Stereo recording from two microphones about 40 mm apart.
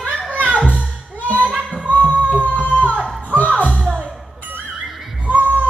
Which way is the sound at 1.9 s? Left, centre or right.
Left.